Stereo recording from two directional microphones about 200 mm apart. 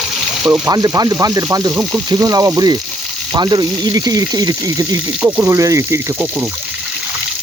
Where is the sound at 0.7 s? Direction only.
20° right (ahead or behind).